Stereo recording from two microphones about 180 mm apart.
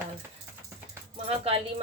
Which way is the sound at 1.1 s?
35° right (ahead or behind).